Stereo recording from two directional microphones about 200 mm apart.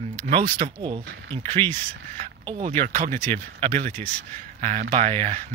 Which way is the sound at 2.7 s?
40° right (ahead or behind).